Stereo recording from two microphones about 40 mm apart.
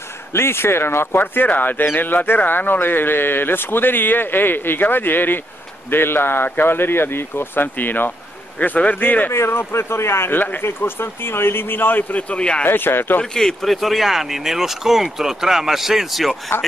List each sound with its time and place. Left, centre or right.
0.3 s speech: left
1.2 s speech: left
5.9 s speech: left
8.5 s a man's voice: left
9.5 s speech: left
10.6 s speech: left
12.1 s a man's voice: left
12.6 s speech: left
13.2 s speech: centre